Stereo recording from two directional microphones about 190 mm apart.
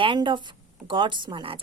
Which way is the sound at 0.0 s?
25° right (ahead or behind).